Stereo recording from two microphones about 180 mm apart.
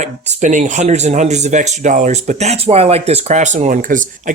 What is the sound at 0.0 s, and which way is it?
Speech, 40° right (ahead or behind).